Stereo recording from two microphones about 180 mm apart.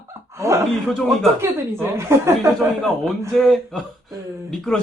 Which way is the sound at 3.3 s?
Centre (ahead or behind).